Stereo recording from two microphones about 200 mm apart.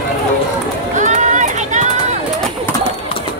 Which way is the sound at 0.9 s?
35° right (ahead or behind).